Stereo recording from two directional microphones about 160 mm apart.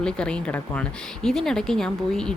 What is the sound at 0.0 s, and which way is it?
Speech, 5° left (ahead or behind).